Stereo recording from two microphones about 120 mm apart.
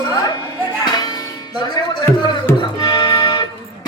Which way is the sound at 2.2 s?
35° left (ahead or behind).